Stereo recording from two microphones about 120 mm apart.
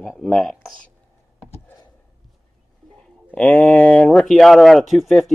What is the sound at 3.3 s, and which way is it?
Speech, 10° left (ahead or behind).